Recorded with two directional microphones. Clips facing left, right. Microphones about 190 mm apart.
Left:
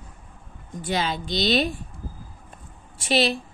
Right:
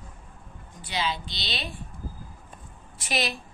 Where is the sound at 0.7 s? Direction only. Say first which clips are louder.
Left 4 dB; 50° left (ahead or behind).